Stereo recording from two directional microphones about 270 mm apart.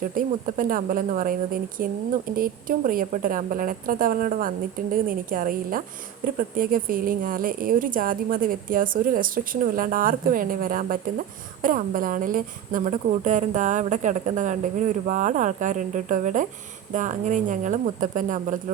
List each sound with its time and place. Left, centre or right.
0.2 s a woman's voice: right